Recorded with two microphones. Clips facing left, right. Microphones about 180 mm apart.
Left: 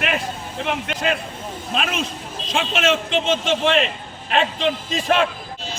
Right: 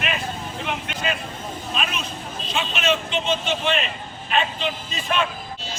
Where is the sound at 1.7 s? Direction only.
90° left.